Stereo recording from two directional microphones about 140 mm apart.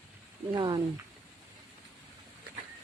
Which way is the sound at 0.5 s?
30° right (ahead or behind).